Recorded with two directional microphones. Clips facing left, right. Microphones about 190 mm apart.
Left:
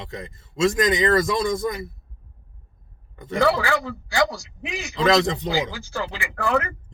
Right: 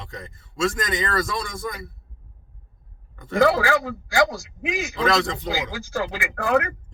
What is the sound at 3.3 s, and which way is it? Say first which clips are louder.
Speech: right 2 dB; 45° right (ahead or behind).